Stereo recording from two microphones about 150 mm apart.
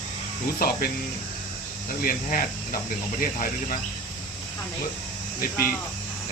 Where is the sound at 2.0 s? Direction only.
70° left (ahead or behind).